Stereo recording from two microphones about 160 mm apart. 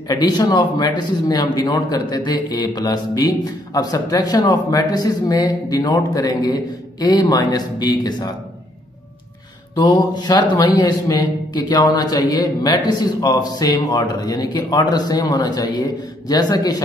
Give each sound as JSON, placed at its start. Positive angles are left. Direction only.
{"t": 0.1, "sound": "a man's voice", "side_deg": 25}
{"t": 9.8, "sound": "a man's voice", "side_deg": 25}